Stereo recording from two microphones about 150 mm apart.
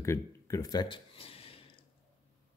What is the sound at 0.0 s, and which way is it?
Speech, 20° left (ahead or behind).